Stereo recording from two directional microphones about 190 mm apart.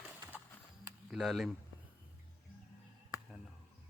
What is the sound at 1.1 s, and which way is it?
Speech, centre (ahead or behind).